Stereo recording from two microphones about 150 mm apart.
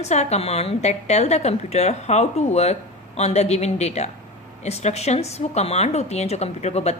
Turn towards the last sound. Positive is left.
turn(degrees=45)  # may be behind; listen again after turning